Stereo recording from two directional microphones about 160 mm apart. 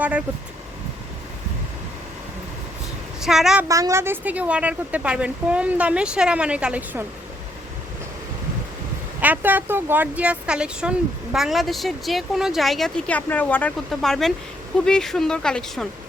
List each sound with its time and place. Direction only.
3.2 s speech: centre (ahead or behind)
3.7 s speech: 20° right (ahead or behind)
9.2 s speech: 10° right (ahead or behind)